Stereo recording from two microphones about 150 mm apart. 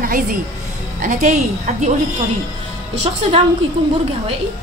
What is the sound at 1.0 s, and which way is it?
Speech, 55° right (ahead or behind).